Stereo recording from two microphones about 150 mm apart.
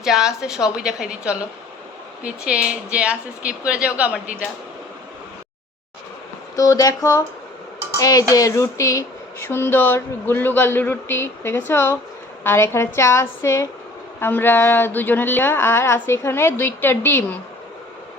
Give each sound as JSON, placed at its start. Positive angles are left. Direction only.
{"t": 0.0, "sound": "a woman's voice", "side_deg": -5}
{"t": 6.6, "sound": "speech", "side_deg": 25}
{"t": 7.9, "sound": "dishes", "side_deg": 25}
{"t": 8.3, "sound": "speech", "side_deg": 25}